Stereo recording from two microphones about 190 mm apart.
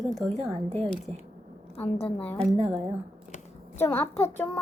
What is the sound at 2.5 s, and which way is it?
Speech, 30° right (ahead or behind).